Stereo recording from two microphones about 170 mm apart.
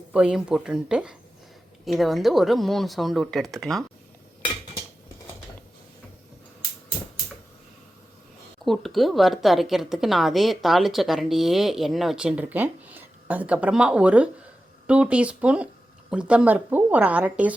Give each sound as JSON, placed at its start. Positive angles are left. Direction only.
{"t": 0.1, "sound": "a woman's voice", "side_deg": -5}
{"t": 8.6, "sound": "a woman's voice", "side_deg": 0}